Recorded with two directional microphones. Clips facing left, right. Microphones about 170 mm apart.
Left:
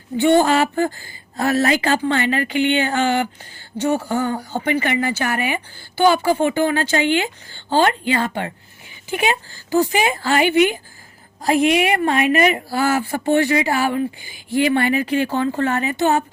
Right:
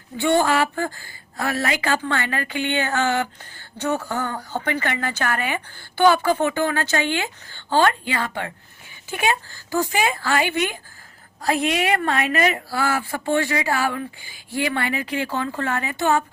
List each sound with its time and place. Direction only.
0.2 s a woman's voice: 25° left (ahead or behind)
9.0 s a woman's voice: 15° left (ahead or behind)
13.0 s a man's voice: 35° left (ahead or behind)